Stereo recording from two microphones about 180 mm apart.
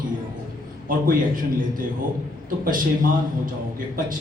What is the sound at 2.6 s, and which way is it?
A man's voice, 50° right (ahead or behind).